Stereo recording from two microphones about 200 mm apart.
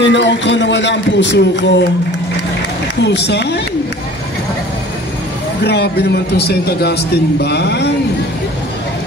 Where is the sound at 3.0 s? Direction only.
60° left (ahead or behind).